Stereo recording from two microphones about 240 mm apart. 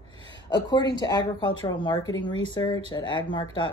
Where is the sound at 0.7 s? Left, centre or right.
Centre.